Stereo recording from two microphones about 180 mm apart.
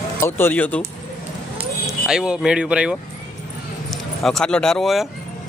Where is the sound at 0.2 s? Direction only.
10° left (ahead or behind).